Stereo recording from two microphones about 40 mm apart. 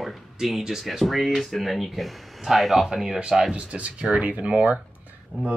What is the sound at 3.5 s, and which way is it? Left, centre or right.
Speech, right.